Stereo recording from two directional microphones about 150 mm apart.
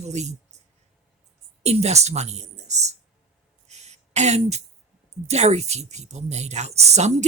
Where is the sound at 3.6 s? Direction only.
50° right (ahead or behind).